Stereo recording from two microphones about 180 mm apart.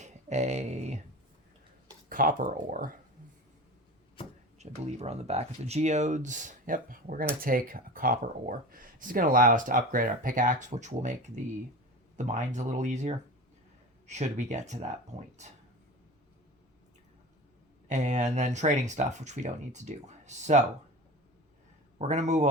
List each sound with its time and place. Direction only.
0.0 s speech: 40° right (ahead or behind)
2.0 s speech: 50° right (ahead or behind)
4.5 s speech: 40° right (ahead or behind)
17.8 s speech: 40° right (ahead or behind)
21.9 s speech: 40° right (ahead or behind)